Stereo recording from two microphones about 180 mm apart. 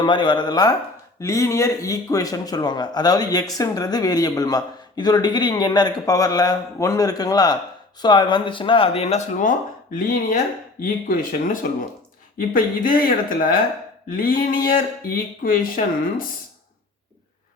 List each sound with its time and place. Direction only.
0.0 s a man's voice: 25° left (ahead or behind); by 16.2 s 50° left (ahead or behind)